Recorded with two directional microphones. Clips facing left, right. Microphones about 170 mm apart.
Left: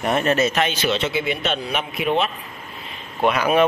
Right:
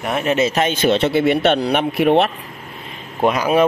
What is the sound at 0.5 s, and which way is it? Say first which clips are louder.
Speech: right 5 dB; 45° right (ahead or behind).